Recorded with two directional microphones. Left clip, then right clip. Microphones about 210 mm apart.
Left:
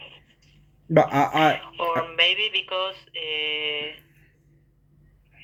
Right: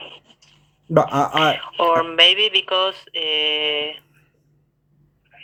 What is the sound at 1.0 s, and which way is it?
Speech, 15° right (ahead or behind).